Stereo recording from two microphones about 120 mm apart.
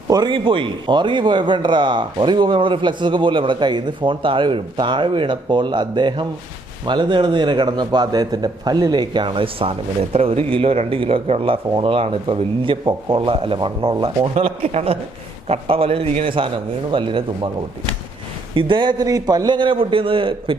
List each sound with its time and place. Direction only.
0.1 s a man's voice: 40° right (ahead or behind)
14.3 s a man's voice: 60° right (ahead or behind); by 17.5 s 45° right (ahead or behind)
18.5 s a man's voice: 40° right (ahead or behind)